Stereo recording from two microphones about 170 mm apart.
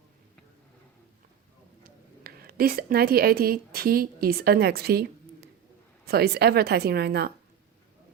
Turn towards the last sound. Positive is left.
turn(degrees=-70)  # may be behind; listen again after turning